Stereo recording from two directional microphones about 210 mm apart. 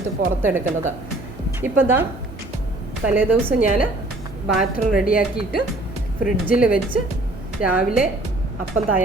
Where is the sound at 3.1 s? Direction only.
10° right (ahead or behind).